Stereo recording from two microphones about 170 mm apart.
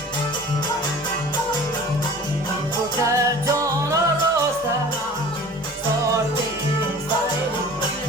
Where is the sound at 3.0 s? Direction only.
20° right (ahead or behind).